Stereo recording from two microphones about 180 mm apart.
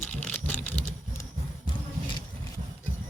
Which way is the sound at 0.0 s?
10° left (ahead or behind).